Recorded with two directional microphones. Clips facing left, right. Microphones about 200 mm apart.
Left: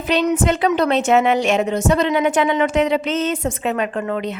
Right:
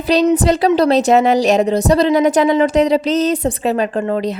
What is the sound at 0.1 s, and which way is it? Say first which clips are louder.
A woman's voice: right 5 dB; 35° right (ahead or behind).